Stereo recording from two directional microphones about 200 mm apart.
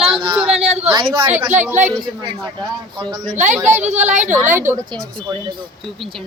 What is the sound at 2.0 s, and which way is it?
A man's voice, 20° right (ahead or behind).